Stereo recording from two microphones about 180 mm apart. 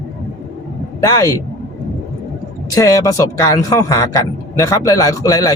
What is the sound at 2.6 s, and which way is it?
A man's voice, 20° left (ahead or behind).